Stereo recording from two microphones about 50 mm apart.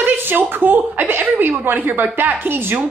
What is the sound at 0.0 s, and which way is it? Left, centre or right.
A woman's voice, right.